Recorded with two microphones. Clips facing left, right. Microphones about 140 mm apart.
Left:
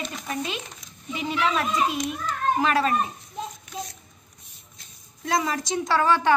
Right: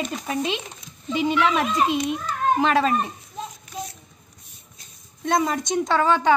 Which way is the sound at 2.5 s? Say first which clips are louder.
Right 2 dB; 25° right (ahead or behind).